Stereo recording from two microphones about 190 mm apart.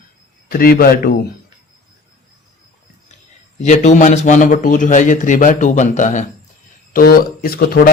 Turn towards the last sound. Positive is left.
turn(degrees=50)  # may be behind; listen again after turning